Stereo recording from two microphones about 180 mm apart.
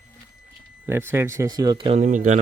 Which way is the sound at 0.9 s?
15° right (ahead or behind).